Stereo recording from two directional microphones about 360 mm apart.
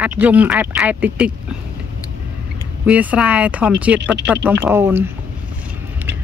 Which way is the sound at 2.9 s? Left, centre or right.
Centre.